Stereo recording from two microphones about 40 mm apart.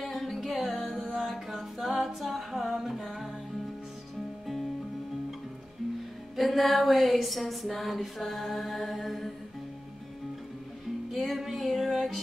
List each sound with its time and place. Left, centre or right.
0.0 s music: centre
6.3 s a sound: centre
11.1 s music: centre